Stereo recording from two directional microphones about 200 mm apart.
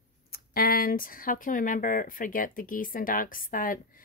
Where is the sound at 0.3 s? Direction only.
50° left (ahead or behind).